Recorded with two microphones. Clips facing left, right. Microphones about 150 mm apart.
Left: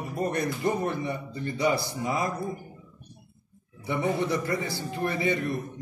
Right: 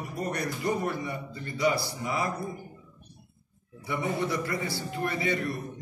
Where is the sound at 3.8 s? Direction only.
20° left (ahead or behind).